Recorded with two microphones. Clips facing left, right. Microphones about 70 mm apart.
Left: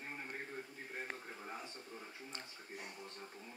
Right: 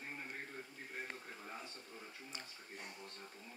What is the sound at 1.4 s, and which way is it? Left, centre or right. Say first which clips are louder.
Speech: left 2 dB; centre.